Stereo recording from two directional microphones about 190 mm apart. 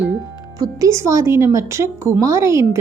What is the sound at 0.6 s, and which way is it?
Speech, 15° right (ahead or behind).